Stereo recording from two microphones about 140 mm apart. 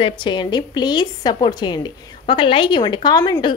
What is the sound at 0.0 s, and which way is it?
A woman's voice, 35° left (ahead or behind).